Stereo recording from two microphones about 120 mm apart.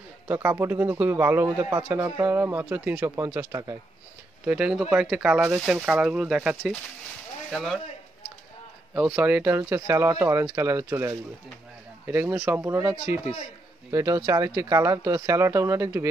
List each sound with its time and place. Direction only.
0.3 s a man's voice: 15° right (ahead or behind)
2.0 s a man's voice: 25° right (ahead or behind)
4.5 s a man's voice: 10° right (ahead or behind)
7.5 s speech: centre (ahead or behind)
8.9 s a man's voice: 10° right (ahead or behind)
9.6 s a man's voice: 25° right (ahead or behind)
13.9 s speech: 30° right (ahead or behind)